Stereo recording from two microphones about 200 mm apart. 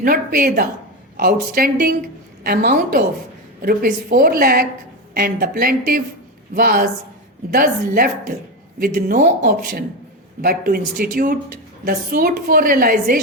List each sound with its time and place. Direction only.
0.0 s a woman's voice: 45° right (ahead or behind)